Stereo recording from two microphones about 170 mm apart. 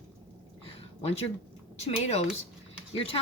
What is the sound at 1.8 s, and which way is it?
Speech, 35° left (ahead or behind).